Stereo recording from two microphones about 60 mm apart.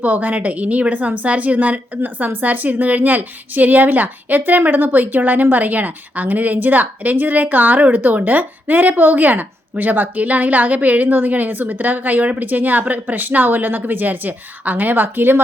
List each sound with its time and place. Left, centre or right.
0.0 s a woman's voice: right